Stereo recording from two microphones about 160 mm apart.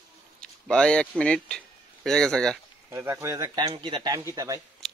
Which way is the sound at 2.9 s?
15° right (ahead or behind).